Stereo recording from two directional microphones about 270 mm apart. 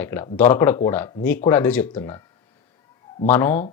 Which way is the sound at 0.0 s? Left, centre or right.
Centre.